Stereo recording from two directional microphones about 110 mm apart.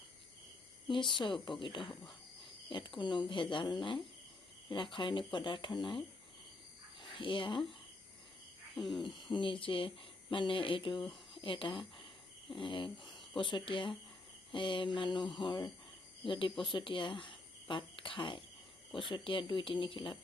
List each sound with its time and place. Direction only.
0.9 s speech: 45° left (ahead or behind)
7.1 s speech: 50° left (ahead or behind)
8.7 s owl: centre (ahead or behind)
9.0 s speech: 50° left (ahead or behind)